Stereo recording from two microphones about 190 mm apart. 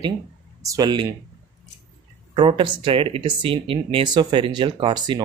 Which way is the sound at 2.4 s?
30° right (ahead or behind).